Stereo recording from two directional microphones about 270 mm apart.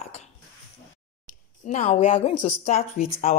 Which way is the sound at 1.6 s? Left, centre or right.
Left.